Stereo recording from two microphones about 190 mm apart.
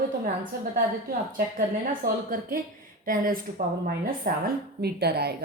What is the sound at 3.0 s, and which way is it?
A woman's voice, 45° right (ahead or behind).